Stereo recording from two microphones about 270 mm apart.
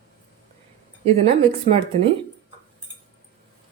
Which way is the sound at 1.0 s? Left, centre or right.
Right.